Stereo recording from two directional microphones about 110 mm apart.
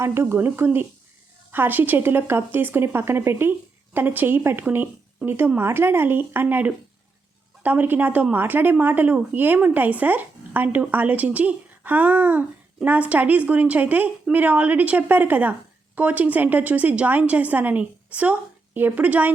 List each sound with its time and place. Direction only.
0.0 s speech: 25° right (ahead or behind)